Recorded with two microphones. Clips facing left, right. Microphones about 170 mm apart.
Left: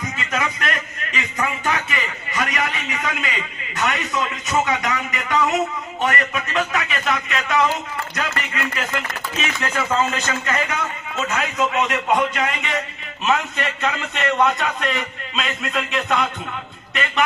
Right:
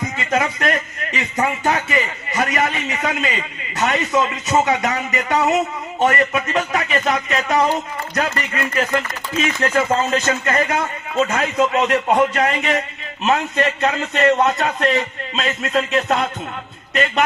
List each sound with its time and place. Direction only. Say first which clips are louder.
0.2 s a man's voice: right 5 dB; 40° right (ahead or behind)